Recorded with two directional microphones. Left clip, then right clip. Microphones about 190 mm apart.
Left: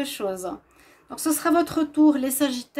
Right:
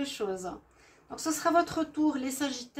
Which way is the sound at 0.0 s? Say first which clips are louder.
Left 6 dB; 60° left (ahead or behind).